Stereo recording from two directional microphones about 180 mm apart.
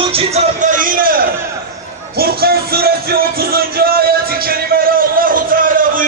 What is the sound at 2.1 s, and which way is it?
Music, 60° right (ahead or behind).